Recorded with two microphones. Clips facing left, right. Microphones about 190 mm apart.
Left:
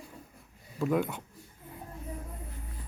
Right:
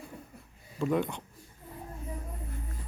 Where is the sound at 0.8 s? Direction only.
5° left (ahead or behind).